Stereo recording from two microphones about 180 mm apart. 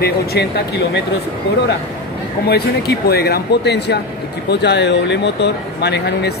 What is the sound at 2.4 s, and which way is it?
Speech, 65° left (ahead or behind).